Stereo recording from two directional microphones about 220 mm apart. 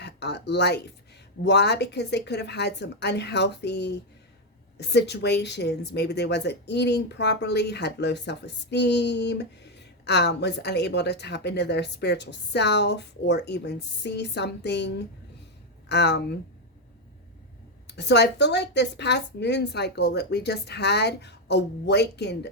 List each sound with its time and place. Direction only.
0.0 s a woman's voice: 50° left (ahead or behind)
17.8 s a woman's voice: 50° left (ahead or behind)